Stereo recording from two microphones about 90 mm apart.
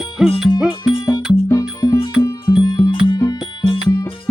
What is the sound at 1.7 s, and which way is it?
Music, 40° left (ahead or behind).